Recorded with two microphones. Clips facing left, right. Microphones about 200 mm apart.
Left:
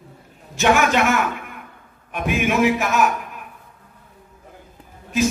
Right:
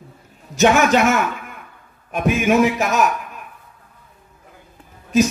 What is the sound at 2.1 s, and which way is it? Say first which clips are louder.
Speech: right 4 dB; 40° right (ahead or behind).